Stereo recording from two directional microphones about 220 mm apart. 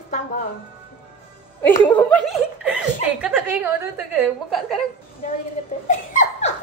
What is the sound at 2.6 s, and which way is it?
A woman's voice, 5° right (ahead or behind).